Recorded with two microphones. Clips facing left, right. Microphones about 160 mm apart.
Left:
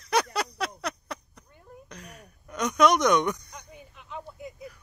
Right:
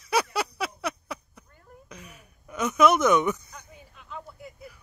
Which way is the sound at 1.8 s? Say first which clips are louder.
Left 1 dB; 5° right (ahead or behind).